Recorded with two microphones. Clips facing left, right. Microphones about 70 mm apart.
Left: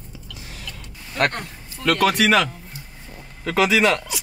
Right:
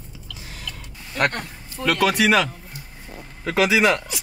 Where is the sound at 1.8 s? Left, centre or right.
Centre.